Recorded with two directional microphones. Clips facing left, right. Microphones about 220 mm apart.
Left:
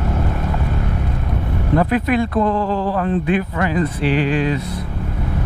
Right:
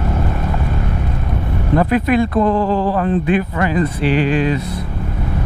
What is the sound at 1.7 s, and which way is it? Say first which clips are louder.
Speech: right 2 dB; 15° right (ahead or behind).